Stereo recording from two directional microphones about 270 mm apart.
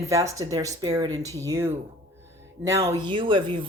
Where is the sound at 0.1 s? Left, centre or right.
Centre.